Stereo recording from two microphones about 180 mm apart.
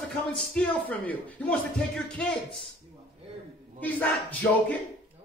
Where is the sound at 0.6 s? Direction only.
10° left (ahead or behind).